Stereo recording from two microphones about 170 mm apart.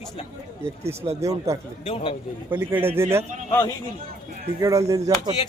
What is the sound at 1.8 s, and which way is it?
Speech, 35° left (ahead or behind).